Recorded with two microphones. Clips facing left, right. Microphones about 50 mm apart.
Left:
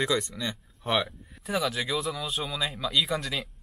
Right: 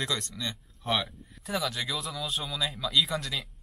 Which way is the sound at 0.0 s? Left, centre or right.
Centre.